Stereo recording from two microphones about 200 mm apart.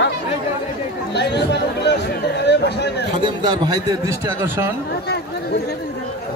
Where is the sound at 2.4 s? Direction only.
60° left (ahead or behind).